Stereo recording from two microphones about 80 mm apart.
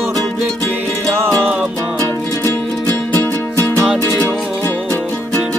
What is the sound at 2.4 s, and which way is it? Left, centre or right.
Music, left.